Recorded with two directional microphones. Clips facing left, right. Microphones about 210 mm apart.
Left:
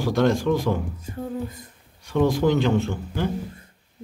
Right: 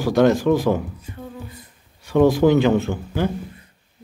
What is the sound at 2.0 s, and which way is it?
Speech, 5° right (ahead or behind).